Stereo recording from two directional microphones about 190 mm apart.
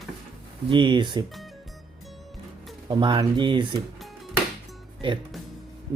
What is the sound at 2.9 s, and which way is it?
Speech, 25° right (ahead or behind).